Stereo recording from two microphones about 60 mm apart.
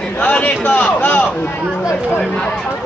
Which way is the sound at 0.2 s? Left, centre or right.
Left.